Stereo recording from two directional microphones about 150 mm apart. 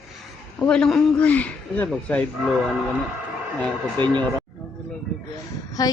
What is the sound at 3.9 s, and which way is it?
Speech, 30° right (ahead or behind).